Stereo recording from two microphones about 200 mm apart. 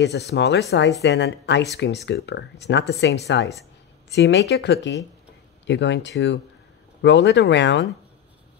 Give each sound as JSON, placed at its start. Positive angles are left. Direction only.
{"t": 0.0, "sound": "speech", "side_deg": 55}